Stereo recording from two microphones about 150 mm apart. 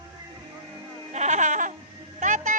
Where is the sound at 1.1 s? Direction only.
50° right (ahead or behind).